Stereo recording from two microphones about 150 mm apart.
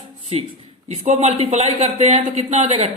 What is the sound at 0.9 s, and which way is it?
A man's voice, 45° right (ahead or behind).